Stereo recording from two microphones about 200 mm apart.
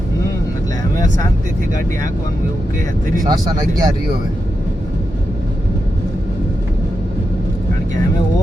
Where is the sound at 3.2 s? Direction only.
20° right (ahead or behind).